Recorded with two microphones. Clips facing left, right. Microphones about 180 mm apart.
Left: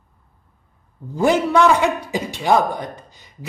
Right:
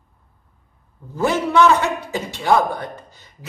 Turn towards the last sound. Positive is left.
turn(degrees=15)  # may be behind; listen again after turning